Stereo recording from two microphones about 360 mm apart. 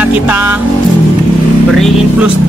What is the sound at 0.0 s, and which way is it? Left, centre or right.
Speech, centre.